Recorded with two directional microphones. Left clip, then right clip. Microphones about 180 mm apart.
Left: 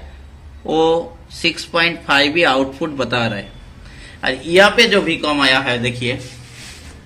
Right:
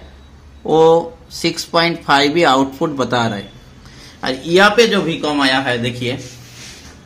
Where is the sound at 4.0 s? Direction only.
60° right (ahead or behind).